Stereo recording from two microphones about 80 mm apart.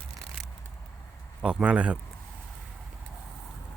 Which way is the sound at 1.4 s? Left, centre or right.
Centre.